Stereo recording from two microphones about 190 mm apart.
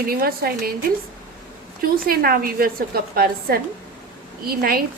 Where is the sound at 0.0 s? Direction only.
50° right (ahead or behind).